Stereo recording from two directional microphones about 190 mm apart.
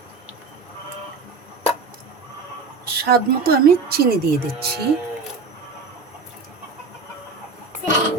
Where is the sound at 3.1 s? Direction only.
55° right (ahead or behind).